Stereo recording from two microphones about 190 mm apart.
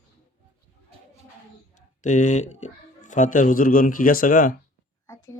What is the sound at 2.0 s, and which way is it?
A man's voice, 40° left (ahead or behind).